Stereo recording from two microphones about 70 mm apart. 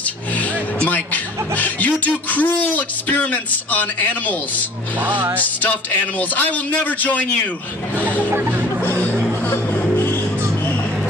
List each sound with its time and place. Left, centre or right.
0.8 s speech: left
5.0 s speech: right
5.4 s speech: left
8.3 s speech: right
8.8 s a sound: left
9.9 s music: left